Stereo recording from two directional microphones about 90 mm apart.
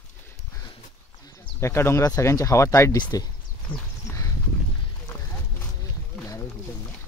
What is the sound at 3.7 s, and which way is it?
Speech, 60° left (ahead or behind).